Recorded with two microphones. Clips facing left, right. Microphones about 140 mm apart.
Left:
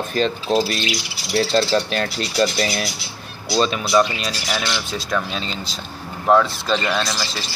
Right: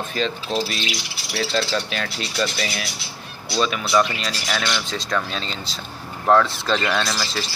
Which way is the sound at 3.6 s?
25° left (ahead or behind).